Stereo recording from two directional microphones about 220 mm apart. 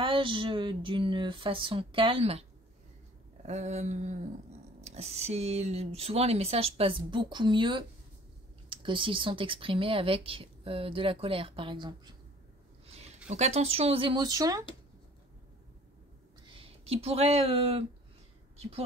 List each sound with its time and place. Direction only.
0.0 s speech: 25° right (ahead or behind)
3.4 s speech: 30° right (ahead or behind)
12.8 s a sound: 25° right (ahead or behind)
13.3 s speech: 30° right (ahead or behind)
16.4 s speech: 25° right (ahead or behind)